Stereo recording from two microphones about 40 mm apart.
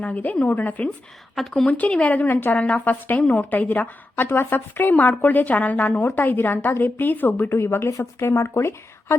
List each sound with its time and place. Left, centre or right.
0.0 s a woman's voice: left
1.4 s a woman's voice: centre
1.6 s a woman's voice: left
1.9 s speech: left
2.2 s a woman's voice: left
2.6 s a woman's voice: left
2.8 s a woman's voice: left
3.2 s a woman's voice: left
3.7 s a woman's voice: left
5.2 s a woman's voice: left
6.0 s a woman's voice: left
6.2 s a woman's voice: left
7.5 s speech: left